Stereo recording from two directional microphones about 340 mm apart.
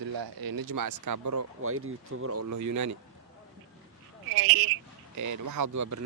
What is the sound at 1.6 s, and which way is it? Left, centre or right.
Speech, right.